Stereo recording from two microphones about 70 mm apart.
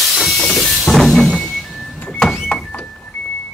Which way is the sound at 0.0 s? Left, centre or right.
Centre.